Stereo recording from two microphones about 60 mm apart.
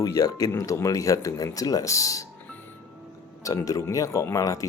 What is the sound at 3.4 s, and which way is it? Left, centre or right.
Speech, left.